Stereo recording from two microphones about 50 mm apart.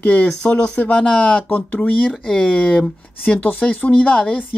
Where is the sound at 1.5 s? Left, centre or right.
Left.